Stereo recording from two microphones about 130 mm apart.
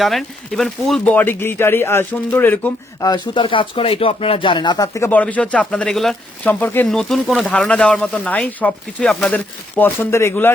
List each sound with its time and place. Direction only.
0.0 s speech: centre (ahead or behind)
3.0 s speech: 35° left (ahead or behind)
4.9 s speech: 15° left (ahead or behind)
6.5 s speech: 15° left (ahead or behind)